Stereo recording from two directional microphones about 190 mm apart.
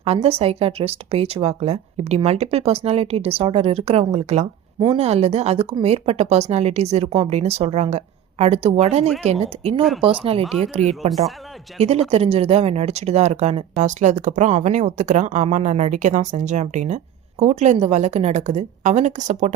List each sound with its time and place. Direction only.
0.0 s speech: 30° right (ahead or behind)